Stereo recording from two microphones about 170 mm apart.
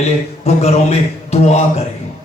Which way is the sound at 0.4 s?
40° left (ahead or behind).